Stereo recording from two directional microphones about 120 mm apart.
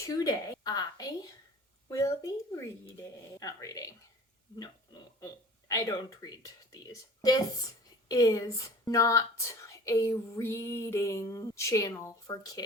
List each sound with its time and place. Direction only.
0.0 s a woman's voice: 30° left (ahead or behind)
3.4 s speech: 30° left (ahead or behind)
5.2 s a sound: 30° left (ahead or behind)
8.0 s speech: 30° left (ahead or behind)